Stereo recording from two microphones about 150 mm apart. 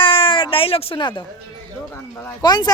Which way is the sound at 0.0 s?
35° left (ahead or behind).